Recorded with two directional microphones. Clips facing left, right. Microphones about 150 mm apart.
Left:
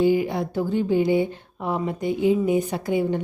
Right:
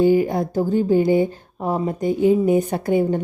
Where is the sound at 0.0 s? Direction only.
45° right (ahead or behind).